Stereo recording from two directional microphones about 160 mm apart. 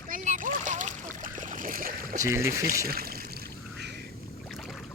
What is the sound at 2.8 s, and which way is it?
Speech, 70° right (ahead or behind).